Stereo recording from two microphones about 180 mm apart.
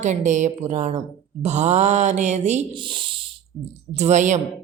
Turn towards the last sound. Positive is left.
turn(degrees=-40)  # may be behind; listen again after turning